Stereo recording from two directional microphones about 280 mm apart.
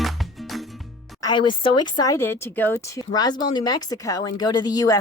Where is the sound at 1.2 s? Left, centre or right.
Centre.